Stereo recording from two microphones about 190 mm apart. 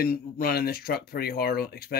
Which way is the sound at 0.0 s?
55° left (ahead or behind).